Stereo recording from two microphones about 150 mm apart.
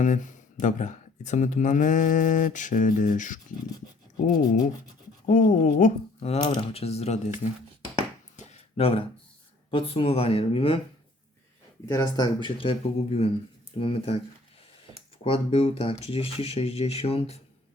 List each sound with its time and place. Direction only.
0.0 s speech: 55° left (ahead or behind)
5.2 s speech: 60° left (ahead or behind)
6.1 s speech: 45° left (ahead or behind)
7.4 s speech: 65° left (ahead or behind)
8.4 s a sound: 40° left (ahead or behind)
9.7 s speech: 35° left (ahead or behind)
11.9 s speech: 25° left (ahead or behind); by 14.2 s 40° left (ahead or behind)
15.2 s speech: 40° left (ahead or behind)